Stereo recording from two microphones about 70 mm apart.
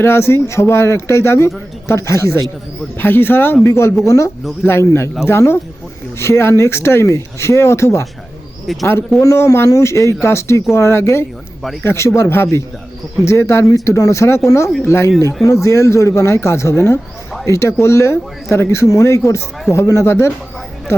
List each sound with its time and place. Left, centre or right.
0.0 s speech: left
3.0 s speech: left
4.6 s speech: left
8.6 s speech: centre
9.2 s speech: left
13.7 s speech: left